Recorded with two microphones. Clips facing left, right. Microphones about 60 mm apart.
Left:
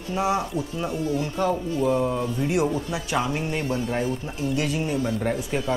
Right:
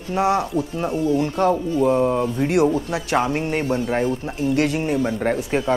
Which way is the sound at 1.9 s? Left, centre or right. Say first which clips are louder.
Right 5 dB; right.